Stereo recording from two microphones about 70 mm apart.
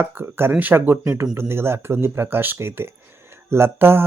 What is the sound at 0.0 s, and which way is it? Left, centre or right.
Speech, right.